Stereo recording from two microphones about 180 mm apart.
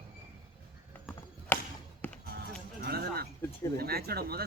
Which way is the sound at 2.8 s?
60° right (ahead or behind).